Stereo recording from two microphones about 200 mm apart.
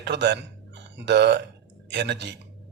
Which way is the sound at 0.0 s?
60° right (ahead or behind).